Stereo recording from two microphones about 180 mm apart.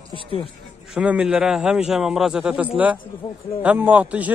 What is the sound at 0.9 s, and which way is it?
Speech, 5° right (ahead or behind).